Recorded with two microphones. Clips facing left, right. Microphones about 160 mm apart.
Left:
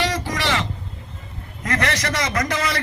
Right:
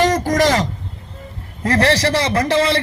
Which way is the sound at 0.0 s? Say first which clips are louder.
Right 9 dB; 45° right (ahead or behind).